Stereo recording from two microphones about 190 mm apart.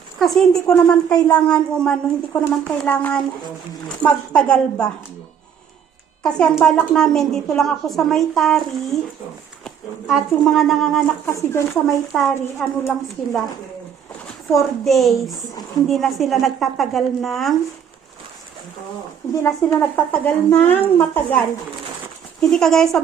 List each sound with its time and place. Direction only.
0.2 s a woman's voice: centre (ahead or behind)
6.2 s a woman's voice: 5° left (ahead or behind)
9.6 s a woman's voice: centre (ahead or behind)
11.3 s speech: 15° left (ahead or behind)
11.9 s a woman's voice: centre (ahead or behind)
14.5 s a woman's voice: centre (ahead or behind)
19.3 s a woman's voice: 15° left (ahead or behind)